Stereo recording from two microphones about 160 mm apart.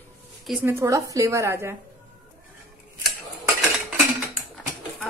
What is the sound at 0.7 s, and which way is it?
A woman's voice, 20° right (ahead or behind).